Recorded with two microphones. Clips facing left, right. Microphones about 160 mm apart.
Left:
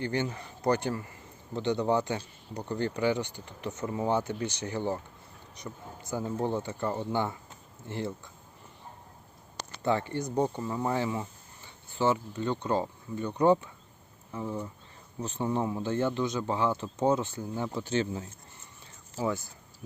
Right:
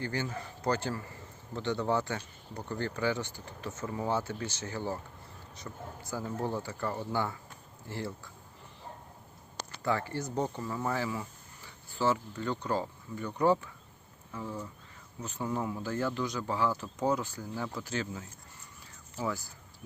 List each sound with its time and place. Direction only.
0.0 s a man's voice: 20° left (ahead or behind)
9.8 s a man's voice: 25° left (ahead or behind)